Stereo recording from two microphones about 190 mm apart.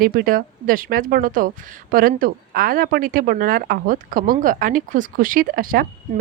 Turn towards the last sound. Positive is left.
turn(degrees=-50)  # may be behind; listen again after turning